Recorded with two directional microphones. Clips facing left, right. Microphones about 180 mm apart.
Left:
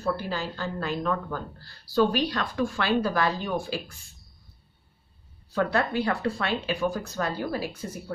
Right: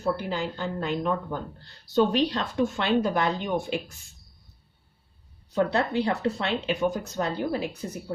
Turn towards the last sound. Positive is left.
turn(degrees=-20)  # may be behind; listen again after turning